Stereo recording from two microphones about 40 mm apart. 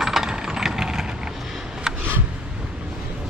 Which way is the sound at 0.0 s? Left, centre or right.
Centre.